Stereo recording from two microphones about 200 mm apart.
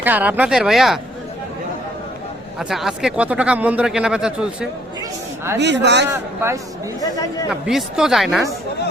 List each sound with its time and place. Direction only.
0.0 s speech: 10° right (ahead or behind)
2.6 s speech: centre (ahead or behind)
5.5 s speech: 60° right (ahead or behind)
7.0 s speech: 15° left (ahead or behind)
7.6 s speech: centre (ahead or behind)